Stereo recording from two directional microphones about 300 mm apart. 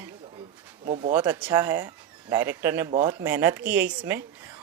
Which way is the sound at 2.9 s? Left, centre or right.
Centre.